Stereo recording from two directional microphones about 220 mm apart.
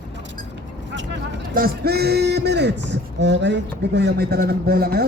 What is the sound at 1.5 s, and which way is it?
Speech, 45° right (ahead or behind).